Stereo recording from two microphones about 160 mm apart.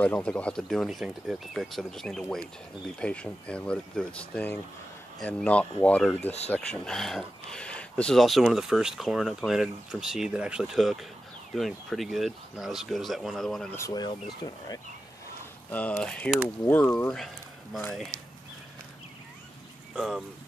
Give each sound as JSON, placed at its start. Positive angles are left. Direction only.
{"t": 0.0, "sound": "speech", "side_deg": 5}
{"t": 13.7, "sound": "speech", "side_deg": 25}
{"t": 15.7, "sound": "speech", "side_deg": 10}
{"t": 20.0, "sound": "speech", "side_deg": -5}